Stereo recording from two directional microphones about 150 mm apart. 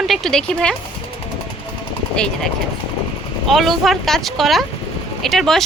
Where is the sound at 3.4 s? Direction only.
Centre (ahead or behind).